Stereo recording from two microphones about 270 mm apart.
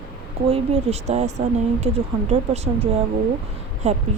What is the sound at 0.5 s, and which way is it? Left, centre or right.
Speech, right.